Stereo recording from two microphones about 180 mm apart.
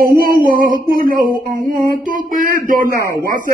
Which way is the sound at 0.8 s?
50° right (ahead or behind).